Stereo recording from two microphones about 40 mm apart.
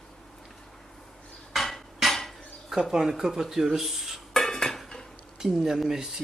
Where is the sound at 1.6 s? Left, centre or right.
Centre.